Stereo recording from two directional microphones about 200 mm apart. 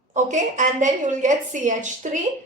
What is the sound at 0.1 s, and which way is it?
A woman's voice, 35° right (ahead or behind).